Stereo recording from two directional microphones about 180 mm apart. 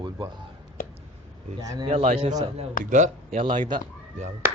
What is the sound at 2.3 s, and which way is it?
Speech, 20° right (ahead or behind).